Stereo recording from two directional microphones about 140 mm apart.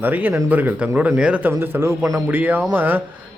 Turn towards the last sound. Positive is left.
turn(degrees=-15)  # may be behind; listen again after turning